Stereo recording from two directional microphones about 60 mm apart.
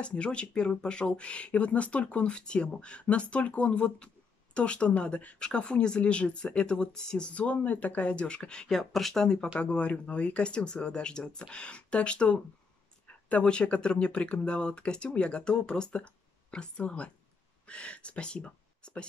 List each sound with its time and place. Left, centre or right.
0.0 s speech: centre
9.6 s speech: left